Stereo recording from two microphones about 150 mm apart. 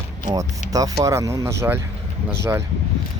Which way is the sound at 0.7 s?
25° right (ahead or behind).